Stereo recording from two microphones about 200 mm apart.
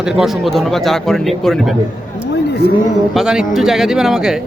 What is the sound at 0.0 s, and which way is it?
Speech, centre (ahead or behind).